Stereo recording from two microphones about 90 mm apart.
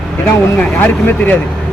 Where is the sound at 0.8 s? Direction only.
20° left (ahead or behind).